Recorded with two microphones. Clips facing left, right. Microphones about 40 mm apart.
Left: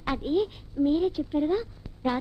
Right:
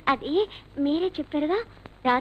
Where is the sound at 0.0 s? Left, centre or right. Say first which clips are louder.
Right 3 dB; right.